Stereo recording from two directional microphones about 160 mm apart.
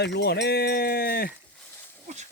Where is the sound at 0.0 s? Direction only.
90° left; by 1.3 s 75° left (ahead or behind).